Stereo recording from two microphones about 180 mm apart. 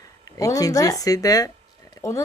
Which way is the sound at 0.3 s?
20° left (ahead or behind).